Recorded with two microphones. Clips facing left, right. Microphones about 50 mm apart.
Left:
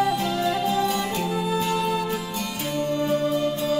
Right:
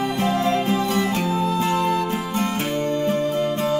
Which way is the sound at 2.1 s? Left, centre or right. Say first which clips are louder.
Right 5 dB; right.